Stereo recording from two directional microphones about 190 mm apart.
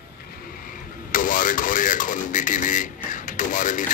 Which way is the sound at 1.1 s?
45° left (ahead or behind).